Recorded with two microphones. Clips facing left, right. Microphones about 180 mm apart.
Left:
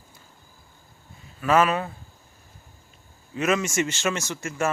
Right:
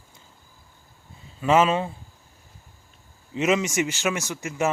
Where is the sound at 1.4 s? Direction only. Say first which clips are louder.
Right 1 dB; 20° right (ahead or behind).